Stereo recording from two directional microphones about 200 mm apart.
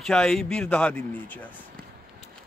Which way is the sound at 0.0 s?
5° left (ahead or behind).